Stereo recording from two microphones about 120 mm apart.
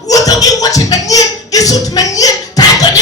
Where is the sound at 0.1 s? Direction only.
30° left (ahead or behind).